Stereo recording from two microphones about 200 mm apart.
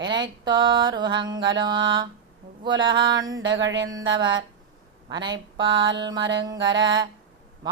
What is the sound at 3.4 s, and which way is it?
Music, 65° right (ahead or behind).